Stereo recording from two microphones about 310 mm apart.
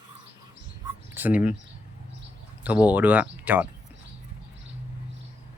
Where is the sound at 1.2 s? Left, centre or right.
Centre.